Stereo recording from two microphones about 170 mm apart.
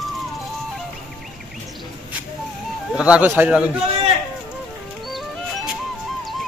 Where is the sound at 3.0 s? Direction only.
5° right (ahead or behind).